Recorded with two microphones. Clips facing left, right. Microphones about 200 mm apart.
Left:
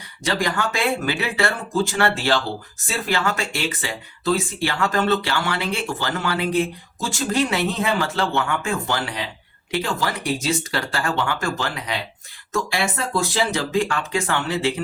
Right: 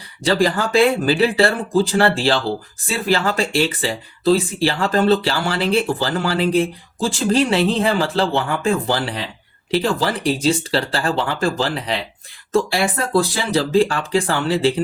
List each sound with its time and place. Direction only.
0.3 s speech: 30° right (ahead or behind)